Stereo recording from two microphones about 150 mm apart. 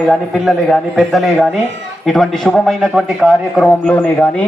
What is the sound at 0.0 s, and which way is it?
A man's voice, centre (ahead or behind).